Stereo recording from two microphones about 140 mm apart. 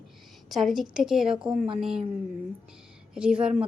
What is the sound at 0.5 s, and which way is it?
A woman's voice, centre (ahead or behind).